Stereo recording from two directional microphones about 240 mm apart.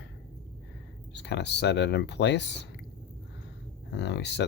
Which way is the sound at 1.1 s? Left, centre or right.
Left.